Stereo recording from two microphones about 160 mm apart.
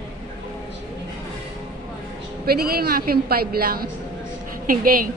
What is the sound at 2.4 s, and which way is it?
A woman's voice, 75° right (ahead or behind).